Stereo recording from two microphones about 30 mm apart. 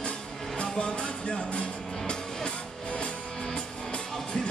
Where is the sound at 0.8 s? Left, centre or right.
Left.